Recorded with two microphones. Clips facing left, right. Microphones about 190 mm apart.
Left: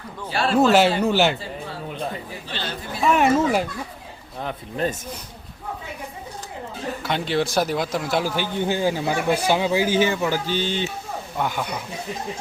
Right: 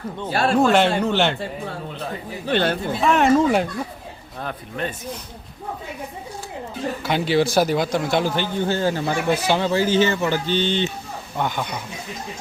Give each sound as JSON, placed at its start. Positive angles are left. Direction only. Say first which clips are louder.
{"t": 0.3, "sound": "speech", "louder": "right 3 dB", "side_deg": -45}
{"t": 0.5, "sound": "speech", "louder": "left 1 dB", "side_deg": 5}
{"t": 2.5, "sound": "speech", "louder": "right 13 dB", "side_deg": -55}
{"t": 3.0, "sound": "speech", "louder": "right 1 dB", "side_deg": 5}
{"t": 7.0, "sound": "speech", "louder": "right 4 dB", "side_deg": -5}
{"t": 8.5, "sound": "speech", "louder": "left 1 dB", "side_deg": 15}